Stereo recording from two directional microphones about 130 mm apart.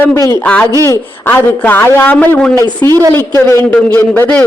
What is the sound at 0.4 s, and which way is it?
A man's voice, 10° left (ahead or behind).